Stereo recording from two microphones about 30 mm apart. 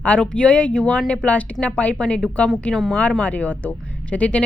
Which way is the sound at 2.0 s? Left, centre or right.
Left.